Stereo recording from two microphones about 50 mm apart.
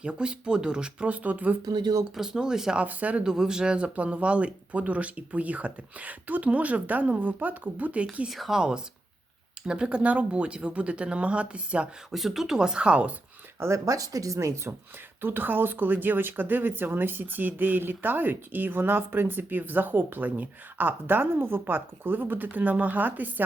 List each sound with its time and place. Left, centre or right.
0.0 s speech: right
2.1 s speech: centre
2.8 s speech: right
3.2 s speech: centre; by 8.0 s right
8.3 s speech: centre; by 11.9 s right
12.1 s speech: centre; by 13.1 s right
13.6 s speech: right
15.2 s speech: right